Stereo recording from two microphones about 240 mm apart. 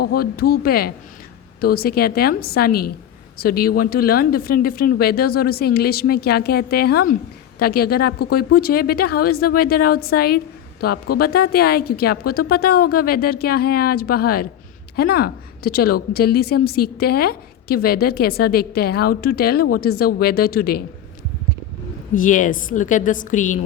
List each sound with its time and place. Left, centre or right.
0.0 s speech: left
22.1 s speech: left